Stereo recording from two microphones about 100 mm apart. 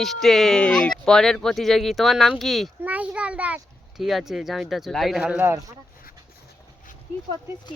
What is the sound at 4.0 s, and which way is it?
Speech, centre (ahead or behind).